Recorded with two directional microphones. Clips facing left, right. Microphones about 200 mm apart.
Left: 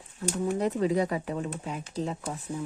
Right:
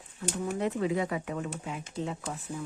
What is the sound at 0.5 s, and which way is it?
Speech, 40° left (ahead or behind).